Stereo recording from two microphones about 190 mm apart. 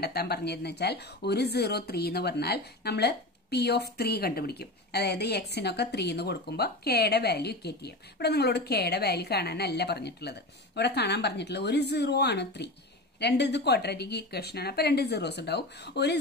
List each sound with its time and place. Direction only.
0.0 s speech: 55° left (ahead or behind)